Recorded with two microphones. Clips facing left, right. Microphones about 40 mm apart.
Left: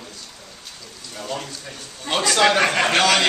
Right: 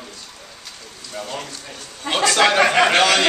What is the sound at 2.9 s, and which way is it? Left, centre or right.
Speech, centre.